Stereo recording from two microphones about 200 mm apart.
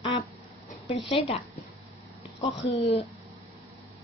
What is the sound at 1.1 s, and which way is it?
Speech, 30° left (ahead or behind).